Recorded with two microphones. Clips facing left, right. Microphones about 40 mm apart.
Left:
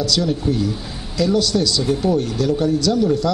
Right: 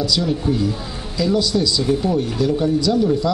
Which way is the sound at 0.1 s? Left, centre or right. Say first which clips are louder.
Even; centre.